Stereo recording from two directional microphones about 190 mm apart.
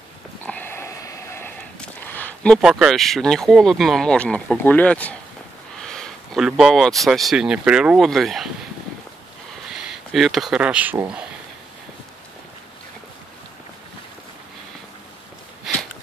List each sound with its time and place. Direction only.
0.5 s a sound: 10° left (ahead or behind)
2.6 s speech: 5° right (ahead or behind)
9.8 s speech: centre (ahead or behind)